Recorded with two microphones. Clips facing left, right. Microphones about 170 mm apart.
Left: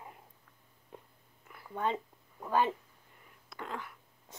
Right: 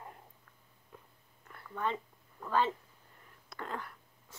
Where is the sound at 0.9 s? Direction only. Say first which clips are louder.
Left 4 dB; 25° left (ahead or behind).